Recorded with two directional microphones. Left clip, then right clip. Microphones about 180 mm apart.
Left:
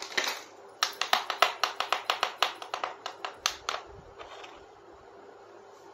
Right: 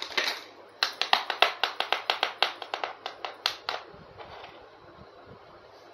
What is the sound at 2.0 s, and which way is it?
Clapping, 25° right (ahead or behind).